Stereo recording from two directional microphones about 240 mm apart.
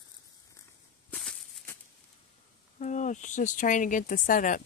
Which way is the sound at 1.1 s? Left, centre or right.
Centre.